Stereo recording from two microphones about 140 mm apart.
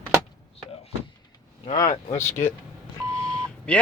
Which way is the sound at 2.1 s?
15° left (ahead or behind).